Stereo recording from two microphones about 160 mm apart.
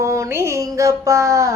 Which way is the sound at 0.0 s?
20° right (ahead or behind).